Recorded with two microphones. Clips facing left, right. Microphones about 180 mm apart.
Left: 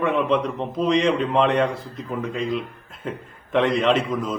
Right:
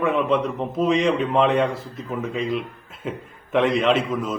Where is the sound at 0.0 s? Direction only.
Centre (ahead or behind).